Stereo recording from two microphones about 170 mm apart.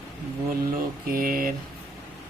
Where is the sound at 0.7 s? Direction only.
55° right (ahead or behind).